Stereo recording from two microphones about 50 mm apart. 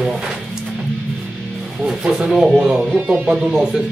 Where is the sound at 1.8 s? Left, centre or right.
Centre.